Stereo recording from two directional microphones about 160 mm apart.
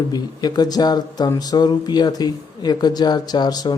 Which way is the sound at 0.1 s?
25° left (ahead or behind).